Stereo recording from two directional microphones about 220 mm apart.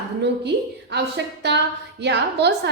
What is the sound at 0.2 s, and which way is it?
A woman's voice, 50° right (ahead or behind).